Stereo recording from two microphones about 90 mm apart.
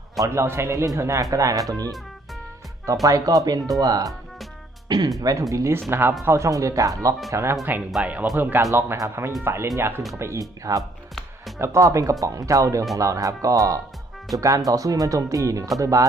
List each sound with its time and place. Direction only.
0.4 s a man's voice: 30° right (ahead or behind)
8.0 s a man's voice: 15° right (ahead or behind)
8.7 s a man's voice: 30° right (ahead or behind)
10.8 s music: centre (ahead or behind)
11.6 s speech: 35° right (ahead or behind)